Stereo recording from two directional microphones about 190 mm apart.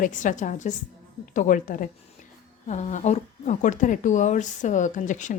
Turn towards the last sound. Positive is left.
turn(degrees=40)  # may be behind; listen again after turning